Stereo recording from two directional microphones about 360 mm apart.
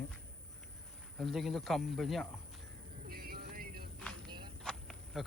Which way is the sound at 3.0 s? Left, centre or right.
Right.